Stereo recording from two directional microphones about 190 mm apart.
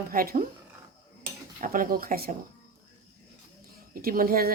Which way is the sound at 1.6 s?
45° right (ahead or behind).